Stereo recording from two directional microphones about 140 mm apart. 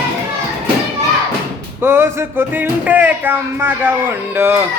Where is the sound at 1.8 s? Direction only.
15° right (ahead or behind).